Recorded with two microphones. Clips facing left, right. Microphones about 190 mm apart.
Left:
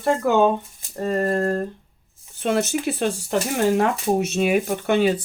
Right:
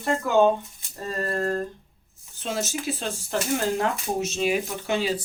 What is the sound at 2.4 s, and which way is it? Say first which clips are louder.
Speech: left 8 dB; 60° left (ahead or behind).